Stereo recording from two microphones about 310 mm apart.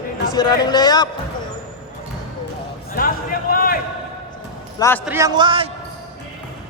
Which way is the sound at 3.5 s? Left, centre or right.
Left.